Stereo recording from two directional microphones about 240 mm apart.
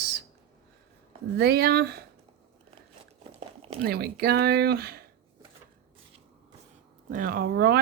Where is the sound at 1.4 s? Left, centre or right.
Right.